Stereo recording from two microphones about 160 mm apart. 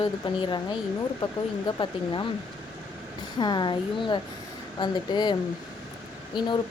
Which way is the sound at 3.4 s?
30° left (ahead or behind).